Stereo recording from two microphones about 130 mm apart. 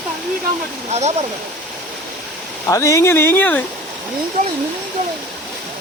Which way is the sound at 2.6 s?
25° left (ahead or behind).